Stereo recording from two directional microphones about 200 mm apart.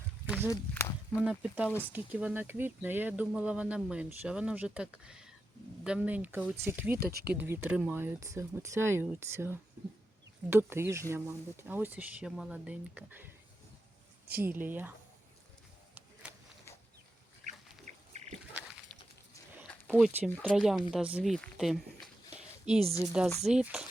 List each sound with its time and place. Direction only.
0.3 s walk: 10° right (ahead or behind)
0.5 s speech: 15° left (ahead or behind)
1.2 s speech: 5° right (ahead or behind)
14.3 s speech: 10° right (ahead or behind)
16.2 s a sound: 5° right (ahead or behind)
17.5 s pig: 35° right (ahead or behind)
18.5 s a sound: 5° right (ahead or behind)
19.9 s speech: 5° right (ahead or behind)
23.2 s speech: 5° right (ahead or behind)